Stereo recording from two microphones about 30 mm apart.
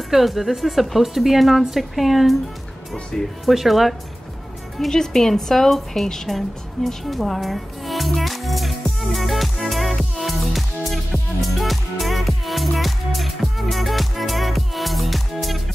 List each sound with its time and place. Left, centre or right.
0.1 s a woman's voice: centre
3.1 s speech: left
3.4 s a woman's voice: centre
4.7 s a woman's voice: centre
6.2 s music: centre